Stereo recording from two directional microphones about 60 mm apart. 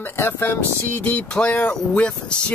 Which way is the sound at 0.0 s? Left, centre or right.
Left.